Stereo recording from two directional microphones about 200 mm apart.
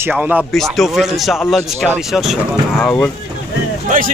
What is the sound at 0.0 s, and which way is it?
Speech, 10° right (ahead or behind).